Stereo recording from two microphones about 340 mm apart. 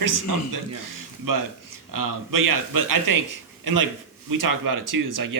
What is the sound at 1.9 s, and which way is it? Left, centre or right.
Speech, right.